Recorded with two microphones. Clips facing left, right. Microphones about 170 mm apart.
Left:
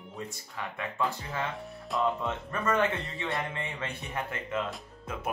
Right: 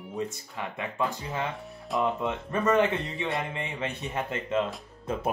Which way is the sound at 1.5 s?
Centre (ahead or behind).